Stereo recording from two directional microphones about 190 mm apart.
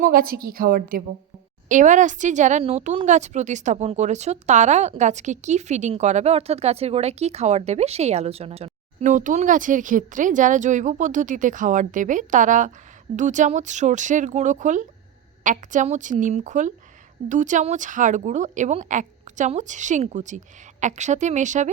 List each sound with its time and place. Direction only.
0.0 s a woman's voice: 50° right (ahead or behind)